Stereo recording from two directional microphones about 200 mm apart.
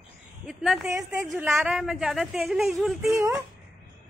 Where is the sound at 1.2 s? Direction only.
10° right (ahead or behind).